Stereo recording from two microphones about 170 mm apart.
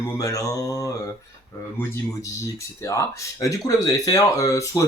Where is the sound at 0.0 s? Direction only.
20° left (ahead or behind).